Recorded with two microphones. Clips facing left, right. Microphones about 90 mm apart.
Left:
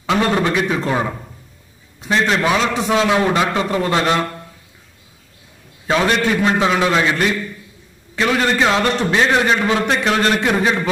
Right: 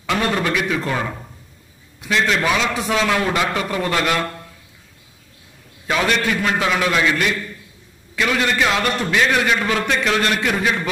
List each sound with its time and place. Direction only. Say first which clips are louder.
0.0 s a man's voice: left 3 dB; 25° left (ahead or behind)
2.8 s a man's voice: left 3 dB; 25° left (ahead or behind)
5.9 s a man's voice: left 3 dB; 30° left (ahead or behind)